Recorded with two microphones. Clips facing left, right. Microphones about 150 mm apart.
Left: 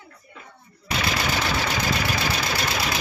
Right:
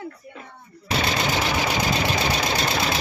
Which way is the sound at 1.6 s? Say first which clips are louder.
Right 2 dB; 20° right (ahead or behind).